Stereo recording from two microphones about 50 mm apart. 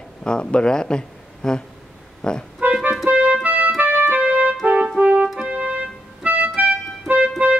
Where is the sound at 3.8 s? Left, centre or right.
Right.